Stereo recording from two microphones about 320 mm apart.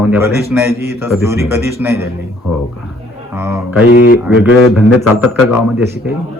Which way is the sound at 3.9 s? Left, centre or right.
Left.